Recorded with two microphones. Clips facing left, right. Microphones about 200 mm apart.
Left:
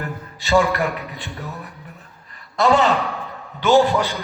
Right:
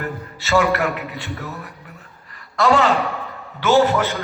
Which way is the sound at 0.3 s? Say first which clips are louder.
Even; 15° left (ahead or behind).